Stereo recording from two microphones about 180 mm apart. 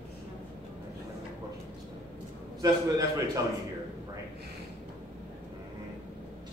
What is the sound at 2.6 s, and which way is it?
Speech, 20° right (ahead or behind).